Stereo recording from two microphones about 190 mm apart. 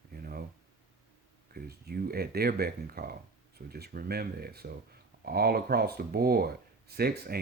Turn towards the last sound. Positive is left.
turn(degrees=-55)  # may be behind; listen again after turning